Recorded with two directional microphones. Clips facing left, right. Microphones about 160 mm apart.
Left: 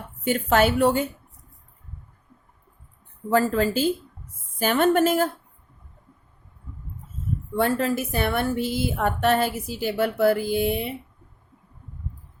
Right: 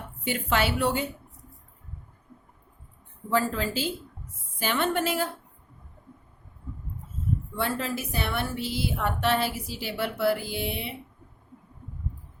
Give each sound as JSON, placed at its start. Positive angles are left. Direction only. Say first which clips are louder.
{"t": 0.3, "sound": "a woman's voice", "louder": "left 6 dB", "side_deg": 45}
{"t": 3.2, "sound": "a woman's voice", "louder": "left 6 dB", "side_deg": 45}
{"t": 7.5, "sound": "a woman's voice", "louder": "left 9 dB", "side_deg": 50}